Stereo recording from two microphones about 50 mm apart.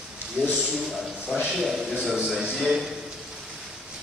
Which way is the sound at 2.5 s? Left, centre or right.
Centre.